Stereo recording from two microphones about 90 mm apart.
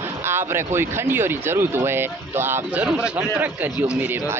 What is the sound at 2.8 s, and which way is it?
A man's voice, 15° right (ahead or behind).